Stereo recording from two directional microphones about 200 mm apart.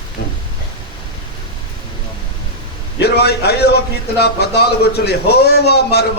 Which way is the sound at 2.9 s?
55° left (ahead or behind).